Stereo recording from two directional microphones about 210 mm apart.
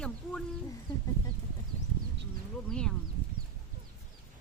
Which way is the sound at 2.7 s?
5° left (ahead or behind).